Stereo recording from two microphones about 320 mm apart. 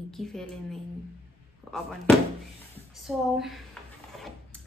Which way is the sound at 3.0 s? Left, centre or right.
Centre.